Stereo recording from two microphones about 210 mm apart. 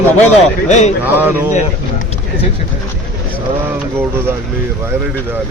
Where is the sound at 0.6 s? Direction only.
35° left (ahead or behind).